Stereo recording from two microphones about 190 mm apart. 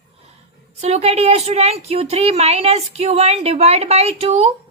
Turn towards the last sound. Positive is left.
turn(degrees=-35)  # may be behind; listen again after turning